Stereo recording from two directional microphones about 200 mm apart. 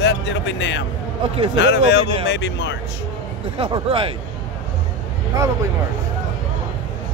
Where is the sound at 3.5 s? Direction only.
25° right (ahead or behind).